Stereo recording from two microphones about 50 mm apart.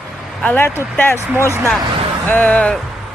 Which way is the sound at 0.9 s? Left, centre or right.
Left.